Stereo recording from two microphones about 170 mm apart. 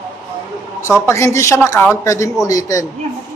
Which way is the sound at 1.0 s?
15° left (ahead or behind).